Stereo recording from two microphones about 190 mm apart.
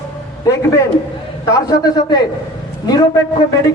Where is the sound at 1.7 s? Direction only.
20° left (ahead or behind).